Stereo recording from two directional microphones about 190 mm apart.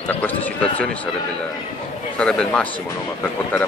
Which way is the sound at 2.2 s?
5° left (ahead or behind).